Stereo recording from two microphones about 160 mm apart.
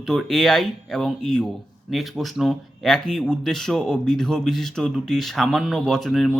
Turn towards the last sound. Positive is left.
turn(degrees=0)  # may be behind; listen again after turning